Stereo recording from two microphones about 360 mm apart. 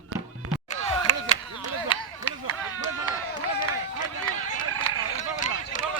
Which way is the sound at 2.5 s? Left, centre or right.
Right.